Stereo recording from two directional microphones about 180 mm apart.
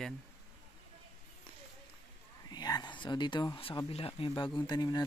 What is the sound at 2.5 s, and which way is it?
Speech, 20° left (ahead or behind).